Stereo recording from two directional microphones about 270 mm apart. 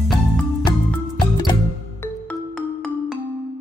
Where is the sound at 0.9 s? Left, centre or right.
Centre.